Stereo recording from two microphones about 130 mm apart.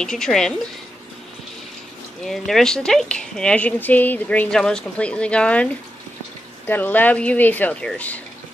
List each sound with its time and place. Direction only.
0.0 s a woman's voice: 5° left (ahead or behind)
2.2 s a woman's voice: centre (ahead or behind)
6.7 s a woman's voice: 15° left (ahead or behind)